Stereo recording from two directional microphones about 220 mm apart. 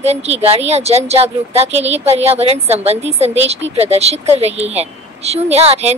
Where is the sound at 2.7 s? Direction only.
30° right (ahead or behind).